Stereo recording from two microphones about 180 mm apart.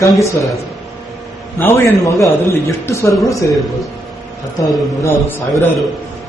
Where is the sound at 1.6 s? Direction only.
15° left (ahead or behind).